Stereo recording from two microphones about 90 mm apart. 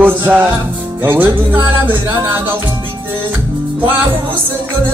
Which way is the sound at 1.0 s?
25° right (ahead or behind).